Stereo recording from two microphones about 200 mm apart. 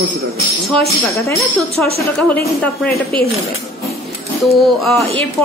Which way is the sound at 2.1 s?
5° left (ahead or behind).